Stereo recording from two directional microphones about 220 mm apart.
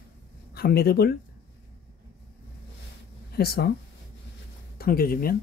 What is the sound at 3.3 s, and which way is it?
Speech, 45° left (ahead or behind).